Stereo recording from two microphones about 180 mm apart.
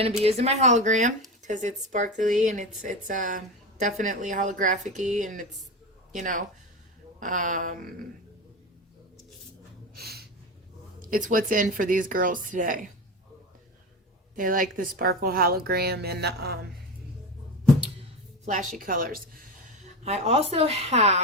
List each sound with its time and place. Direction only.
0.2 s a woman's voice: 35° right (ahead or behind)
9.9 s a sound: 60° right (ahead or behind)
11.0 s a woman's voice: 50° right (ahead or behind)
14.3 s a woman's voice: 50° right (ahead or behind)
18.4 s speech: 45° right (ahead or behind)